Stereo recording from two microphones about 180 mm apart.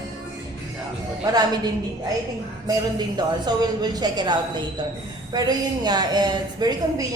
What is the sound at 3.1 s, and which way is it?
A woman's voice, 25° right (ahead or behind).